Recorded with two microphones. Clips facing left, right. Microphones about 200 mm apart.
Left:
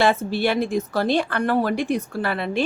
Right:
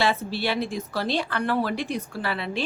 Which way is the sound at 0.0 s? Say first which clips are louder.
Left 5 dB; 50° left (ahead or behind).